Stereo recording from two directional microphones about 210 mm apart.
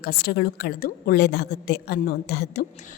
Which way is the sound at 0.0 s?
50° left (ahead or behind).